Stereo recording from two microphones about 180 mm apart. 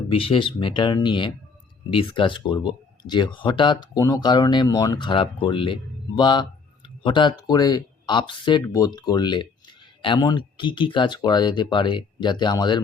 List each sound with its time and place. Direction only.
0.1 s speech: 30° left (ahead or behind)